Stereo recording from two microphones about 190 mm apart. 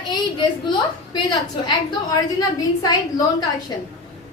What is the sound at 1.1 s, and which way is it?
A woman's voice, 20° left (ahead or behind).